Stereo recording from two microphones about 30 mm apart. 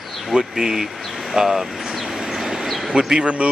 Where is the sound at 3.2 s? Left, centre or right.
Right.